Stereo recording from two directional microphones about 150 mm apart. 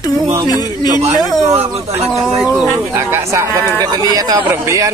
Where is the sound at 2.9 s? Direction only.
20° right (ahead or behind).